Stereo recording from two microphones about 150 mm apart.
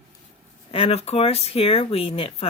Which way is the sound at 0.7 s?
40° left (ahead or behind).